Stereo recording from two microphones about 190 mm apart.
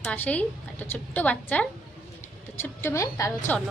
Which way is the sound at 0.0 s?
5° left (ahead or behind).